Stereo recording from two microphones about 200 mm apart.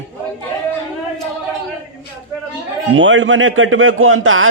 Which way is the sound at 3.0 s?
70° right (ahead or behind).